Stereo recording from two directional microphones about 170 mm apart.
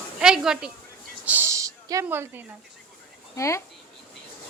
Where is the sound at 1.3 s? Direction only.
15° right (ahead or behind).